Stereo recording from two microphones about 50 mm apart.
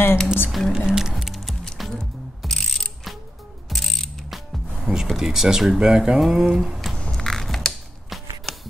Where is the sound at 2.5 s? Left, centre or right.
Centre.